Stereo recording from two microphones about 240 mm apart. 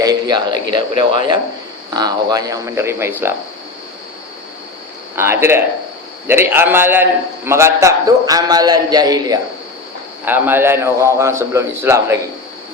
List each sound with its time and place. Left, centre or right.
0.0 s a man's voice: centre
5.1 s a man's voice: centre